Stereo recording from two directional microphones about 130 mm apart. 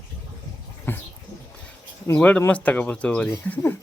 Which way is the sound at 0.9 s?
15° left (ahead or behind).